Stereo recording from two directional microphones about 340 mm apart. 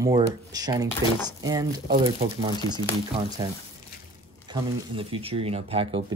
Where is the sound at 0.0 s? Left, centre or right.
Centre.